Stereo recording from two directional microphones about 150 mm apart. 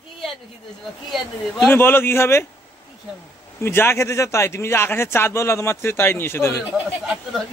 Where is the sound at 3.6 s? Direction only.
15° left (ahead or behind).